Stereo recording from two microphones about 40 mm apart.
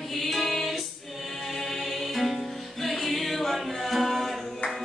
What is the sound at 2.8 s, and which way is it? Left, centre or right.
A capella, centre.